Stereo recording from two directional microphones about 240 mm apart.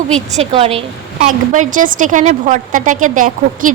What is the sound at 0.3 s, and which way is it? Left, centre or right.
A woman's voice, right.